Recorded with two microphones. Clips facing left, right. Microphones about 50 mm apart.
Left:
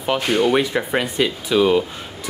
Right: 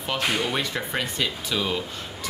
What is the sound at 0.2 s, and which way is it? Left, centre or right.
Speech, centre.